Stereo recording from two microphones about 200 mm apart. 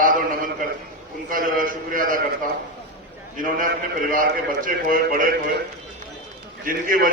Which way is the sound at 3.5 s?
40° right (ahead or behind).